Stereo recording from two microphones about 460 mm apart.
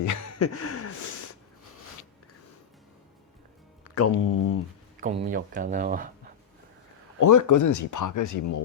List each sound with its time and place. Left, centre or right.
0.0 s a sound: left
3.9 s speech: left
4.9 s speech: centre
7.2 s speech: left